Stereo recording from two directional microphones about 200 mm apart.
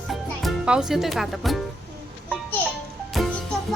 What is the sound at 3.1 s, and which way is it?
Music, centre (ahead or behind).